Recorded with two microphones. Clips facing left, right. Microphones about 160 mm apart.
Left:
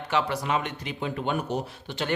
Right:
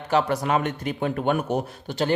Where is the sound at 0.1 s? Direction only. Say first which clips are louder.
Right 5 dB; 45° right (ahead or behind).